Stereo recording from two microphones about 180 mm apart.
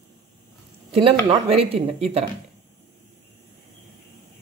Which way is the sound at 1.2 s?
35° right (ahead or behind).